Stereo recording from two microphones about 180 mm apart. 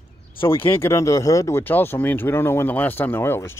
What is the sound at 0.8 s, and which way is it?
Speech, 15° left (ahead or behind).